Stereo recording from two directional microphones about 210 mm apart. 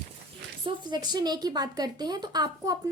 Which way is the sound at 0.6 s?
20° right (ahead or behind).